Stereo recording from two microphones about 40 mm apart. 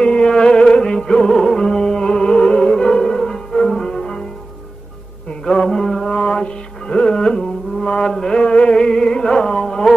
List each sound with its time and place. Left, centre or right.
0.0 s music: left
5.4 s music: left